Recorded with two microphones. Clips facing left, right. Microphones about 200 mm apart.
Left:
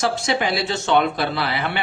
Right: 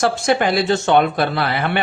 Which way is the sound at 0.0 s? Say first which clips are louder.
Right 5 dB; 50° right (ahead or behind).